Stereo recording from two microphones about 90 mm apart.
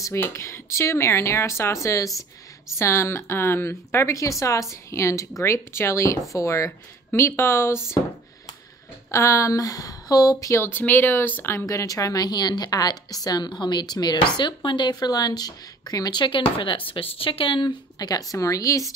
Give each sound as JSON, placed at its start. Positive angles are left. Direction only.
{"t": 0.0, "sound": "speech", "side_deg": 30}
{"t": 9.1, "sound": "speech", "side_deg": 35}
{"t": 11.6, "sound": "a woman's voice", "side_deg": 40}
{"t": 16.2, "sound": "speech", "side_deg": 70}
{"t": 17.9, "sound": "speech", "side_deg": 45}